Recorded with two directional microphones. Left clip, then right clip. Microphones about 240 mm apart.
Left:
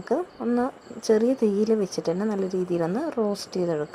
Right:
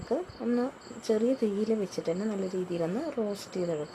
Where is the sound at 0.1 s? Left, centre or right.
Centre.